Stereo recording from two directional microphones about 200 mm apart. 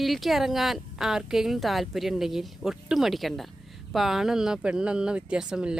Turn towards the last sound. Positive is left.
turn(degrees=-5)  # may be behind; listen again after turning